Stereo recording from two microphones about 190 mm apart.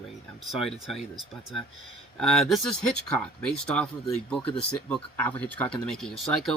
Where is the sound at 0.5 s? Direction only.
Centre (ahead or behind).